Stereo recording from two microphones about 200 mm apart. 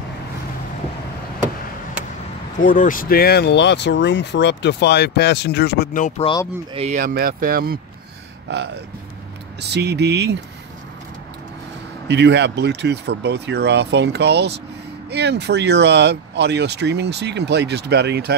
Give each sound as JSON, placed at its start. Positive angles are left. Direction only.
{"t": 2.6, "sound": "speech", "side_deg": 40}
{"t": 5.9, "sound": "speech", "side_deg": 40}
{"t": 6.7, "sound": "speech", "side_deg": -30}
{"t": 7.0, "sound": "speech", "side_deg": -45}
{"t": 9.6, "sound": "speech", "side_deg": -55}
{"t": 12.1, "sound": "speech", "side_deg": -60}